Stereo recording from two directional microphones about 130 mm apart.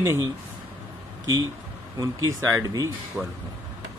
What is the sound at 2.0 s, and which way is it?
Speech, 25° right (ahead or behind).